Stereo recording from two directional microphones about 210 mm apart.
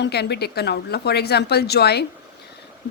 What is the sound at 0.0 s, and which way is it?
Speech, 50° left (ahead or behind).